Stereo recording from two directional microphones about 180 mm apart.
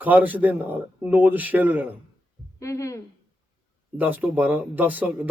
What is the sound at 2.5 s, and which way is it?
Speech, 15° left (ahead or behind).